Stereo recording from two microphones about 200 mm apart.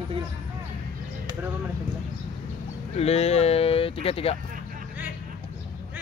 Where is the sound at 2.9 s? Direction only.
30° left (ahead or behind).